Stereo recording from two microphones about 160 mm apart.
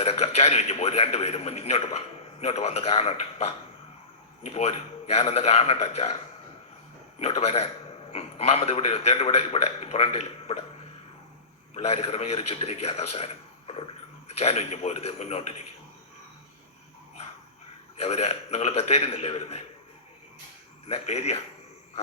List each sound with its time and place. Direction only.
0.0 s a man's voice: 40° left (ahead or behind)
7.2 s a man's voice: 40° left (ahead or behind)
11.7 s a man's voice: 40° left (ahead or behind)
17.9 s a man's voice: 40° left (ahead or behind)
20.8 s a man's voice: 40° left (ahead or behind)